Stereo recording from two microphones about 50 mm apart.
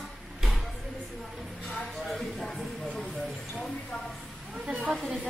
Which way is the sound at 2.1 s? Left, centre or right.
Centre.